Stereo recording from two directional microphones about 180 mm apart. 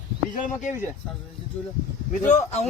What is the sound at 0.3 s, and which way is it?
Speech, 45° left (ahead or behind).